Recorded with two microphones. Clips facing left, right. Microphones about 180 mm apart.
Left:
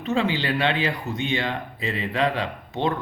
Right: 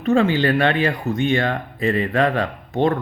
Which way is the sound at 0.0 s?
50° right (ahead or behind).